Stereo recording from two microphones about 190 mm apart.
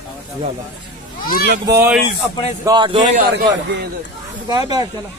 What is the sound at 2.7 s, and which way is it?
Speech, 25° right (ahead or behind).